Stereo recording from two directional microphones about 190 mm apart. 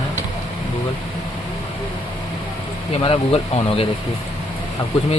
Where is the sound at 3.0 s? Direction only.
30° left (ahead or behind).